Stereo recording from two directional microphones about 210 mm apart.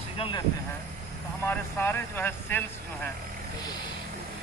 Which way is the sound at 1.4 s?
10° left (ahead or behind).